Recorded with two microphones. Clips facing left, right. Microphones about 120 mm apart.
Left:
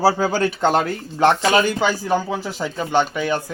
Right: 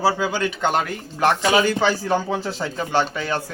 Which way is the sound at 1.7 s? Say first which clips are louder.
Even; 15° left (ahead or behind).